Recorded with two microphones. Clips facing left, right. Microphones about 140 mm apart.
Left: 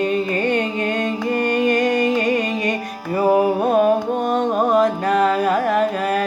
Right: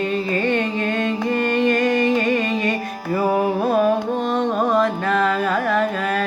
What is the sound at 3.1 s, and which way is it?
Music, 25° left (ahead or behind).